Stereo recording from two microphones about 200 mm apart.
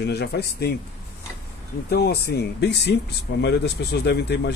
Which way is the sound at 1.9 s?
55° left (ahead or behind).